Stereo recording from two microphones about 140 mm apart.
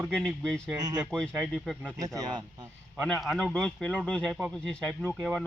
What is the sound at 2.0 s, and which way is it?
Speech, 25° right (ahead or behind).